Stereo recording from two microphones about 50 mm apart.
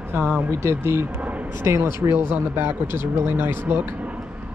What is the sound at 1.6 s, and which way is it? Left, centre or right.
Speech, right.